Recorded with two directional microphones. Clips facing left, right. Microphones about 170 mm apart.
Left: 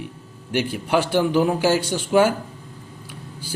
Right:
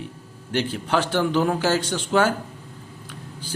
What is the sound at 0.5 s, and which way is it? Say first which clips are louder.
A man's voice: left 2 dB; 10° left (ahead or behind).